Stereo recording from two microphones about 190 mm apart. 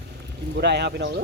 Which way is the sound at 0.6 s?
60° right (ahead or behind).